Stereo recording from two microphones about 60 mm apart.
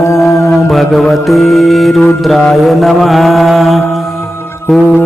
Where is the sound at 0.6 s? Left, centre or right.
Centre.